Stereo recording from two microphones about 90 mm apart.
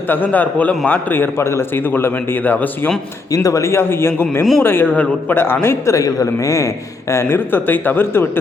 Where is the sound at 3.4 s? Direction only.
35° left (ahead or behind).